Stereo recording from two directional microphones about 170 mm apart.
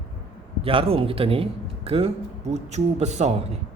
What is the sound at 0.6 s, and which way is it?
Speech, 35° right (ahead or behind).